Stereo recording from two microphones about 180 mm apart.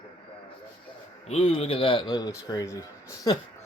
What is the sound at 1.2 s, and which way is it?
Speech, 30° left (ahead or behind).